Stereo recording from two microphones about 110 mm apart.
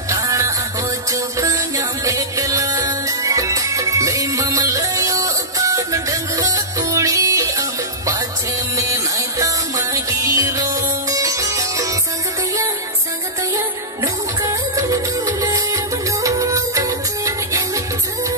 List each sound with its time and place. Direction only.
0.1 s music: 30° right (ahead or behind)
8.7 s music: 30° right (ahead or behind)
13.6 s music: 30° right (ahead or behind)